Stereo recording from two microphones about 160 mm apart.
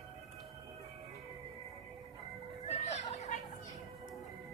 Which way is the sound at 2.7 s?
45° left (ahead or behind).